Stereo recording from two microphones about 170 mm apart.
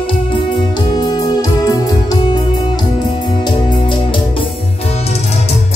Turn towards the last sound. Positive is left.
turn(degrees=30)  # may be behind; listen again after turning